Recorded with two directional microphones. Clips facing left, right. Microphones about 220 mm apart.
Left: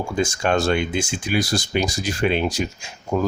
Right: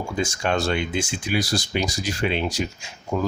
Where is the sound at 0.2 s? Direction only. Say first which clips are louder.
Left 3 dB; 50° left (ahead or behind).